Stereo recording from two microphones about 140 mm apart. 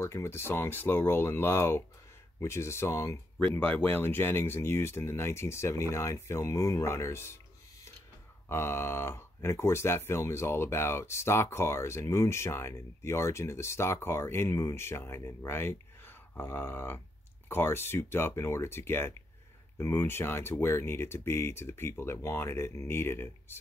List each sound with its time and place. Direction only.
0.0 s speech: 20° left (ahead or behind)
8.5 s speech: 15° left (ahead or behind)